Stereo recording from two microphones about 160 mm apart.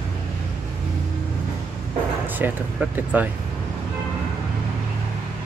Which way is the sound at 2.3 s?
10° right (ahead or behind).